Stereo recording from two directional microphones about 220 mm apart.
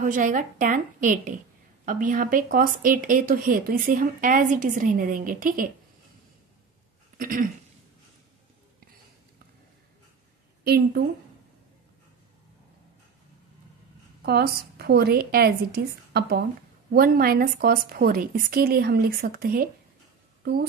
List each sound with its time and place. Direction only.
0.0 s speech: 35° right (ahead or behind)
7.2 s a sound: 40° right (ahead or behind)
10.6 s a woman's voice: 45° right (ahead or behind)
14.2 s a woman's voice: 45° right (ahead or behind)